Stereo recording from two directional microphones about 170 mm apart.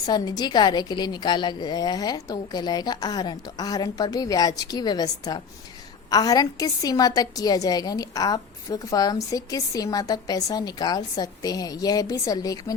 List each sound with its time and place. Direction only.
0.0 s a woman's voice: 25° left (ahead or behind)